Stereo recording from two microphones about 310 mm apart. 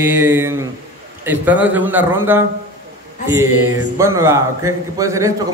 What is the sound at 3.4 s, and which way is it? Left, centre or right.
Mantra, right.